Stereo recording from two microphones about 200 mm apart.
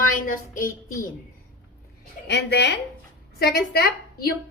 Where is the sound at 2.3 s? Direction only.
55° left (ahead or behind).